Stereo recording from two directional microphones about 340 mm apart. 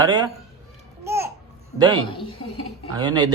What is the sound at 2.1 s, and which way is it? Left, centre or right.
Speech, centre.